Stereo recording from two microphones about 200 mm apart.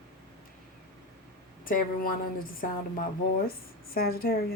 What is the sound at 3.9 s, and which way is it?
Speech, 50° left (ahead or behind).